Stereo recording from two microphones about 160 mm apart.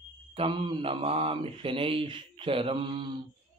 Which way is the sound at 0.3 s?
30° right (ahead or behind).